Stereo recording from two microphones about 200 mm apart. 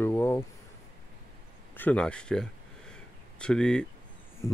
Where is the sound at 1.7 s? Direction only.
10° left (ahead or behind).